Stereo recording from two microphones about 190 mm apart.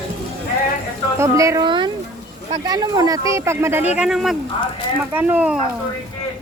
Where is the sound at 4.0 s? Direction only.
Centre (ahead or behind).